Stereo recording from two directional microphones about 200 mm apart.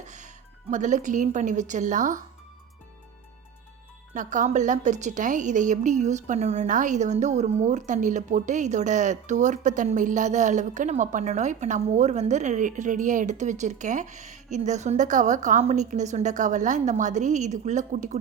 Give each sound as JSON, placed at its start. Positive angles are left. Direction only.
{"t": 0.0, "sound": "music", "side_deg": -35}
{"t": 0.7, "sound": "a woman's voice", "side_deg": -35}
{"t": 4.1, "sound": "a woman's voice", "side_deg": -40}